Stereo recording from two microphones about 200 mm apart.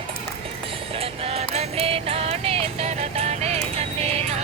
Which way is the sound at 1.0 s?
30° right (ahead or behind).